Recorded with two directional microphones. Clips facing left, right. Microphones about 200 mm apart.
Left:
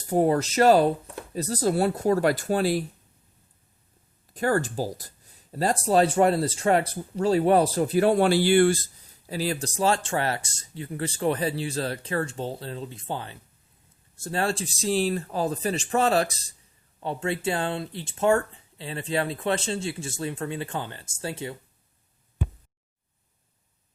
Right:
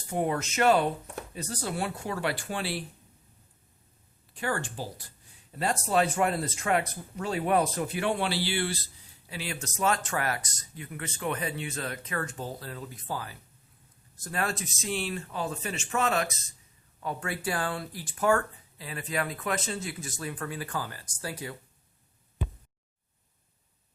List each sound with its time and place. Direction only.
0.1 s speech: 35° left (ahead or behind)
4.4 s speech: 40° left (ahead or behind); by 21.5 s 25° left (ahead or behind)